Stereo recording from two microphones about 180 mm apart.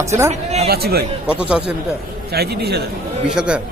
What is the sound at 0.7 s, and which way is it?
Speech, 60° right (ahead or behind).